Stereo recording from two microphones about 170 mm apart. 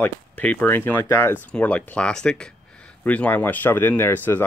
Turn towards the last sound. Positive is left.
turn(degrees=10)  # may be behind; listen again after turning